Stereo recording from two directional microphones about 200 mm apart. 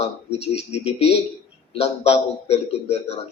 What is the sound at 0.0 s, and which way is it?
A man's voice, 30° left (ahead or behind).